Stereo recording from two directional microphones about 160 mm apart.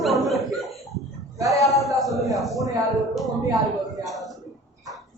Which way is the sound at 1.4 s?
20° right (ahead or behind).